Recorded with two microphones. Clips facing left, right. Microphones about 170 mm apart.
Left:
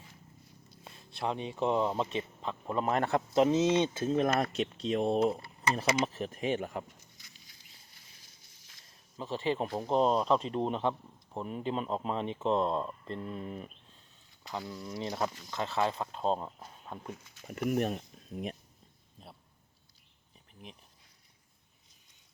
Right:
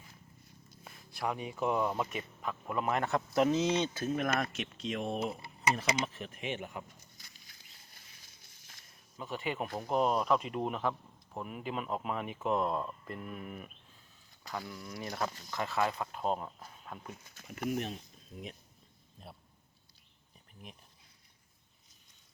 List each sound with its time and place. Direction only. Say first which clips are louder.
0.9 s speech: left 2 dB; 25° left (ahead or behind)
9.1 s speech: left 5 dB; 30° left (ahead or behind)
17.7 s speech: left 5 dB; 55° left (ahead or behind)